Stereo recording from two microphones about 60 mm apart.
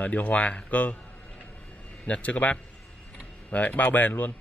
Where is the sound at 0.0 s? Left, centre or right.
Left.